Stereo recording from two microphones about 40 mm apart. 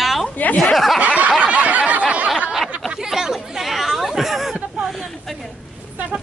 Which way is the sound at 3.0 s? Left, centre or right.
Centre.